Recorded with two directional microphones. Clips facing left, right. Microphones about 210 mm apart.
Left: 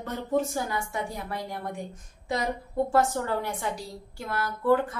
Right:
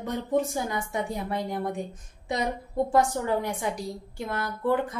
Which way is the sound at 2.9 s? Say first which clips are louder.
Right 2 dB; 15° right (ahead or behind).